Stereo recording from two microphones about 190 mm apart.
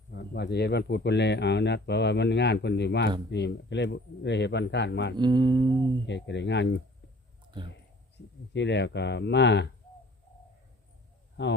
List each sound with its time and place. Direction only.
0.1 s speech: 60° left (ahead or behind)
5.1 s music: 25° right (ahead or behind)
6.1 s speech: 65° left (ahead or behind)
8.5 s speech: 65° left (ahead or behind)
11.4 s speech: 65° left (ahead or behind)